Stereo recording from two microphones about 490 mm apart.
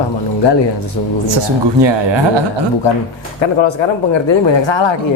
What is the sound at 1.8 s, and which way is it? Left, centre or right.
Speech, right.